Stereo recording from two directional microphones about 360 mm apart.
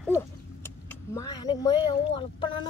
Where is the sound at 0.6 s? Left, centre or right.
Centre.